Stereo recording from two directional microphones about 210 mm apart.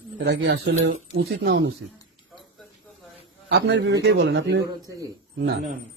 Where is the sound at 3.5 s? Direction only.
55° right (ahead or behind).